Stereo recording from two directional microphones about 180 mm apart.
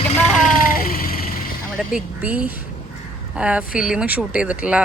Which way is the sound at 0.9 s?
55° left (ahead or behind).